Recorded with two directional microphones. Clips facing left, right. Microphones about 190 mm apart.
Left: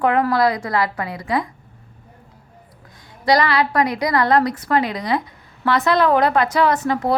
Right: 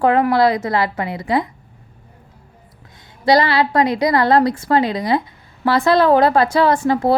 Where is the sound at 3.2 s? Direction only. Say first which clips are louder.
Right 2 dB; 25° right (ahead or behind).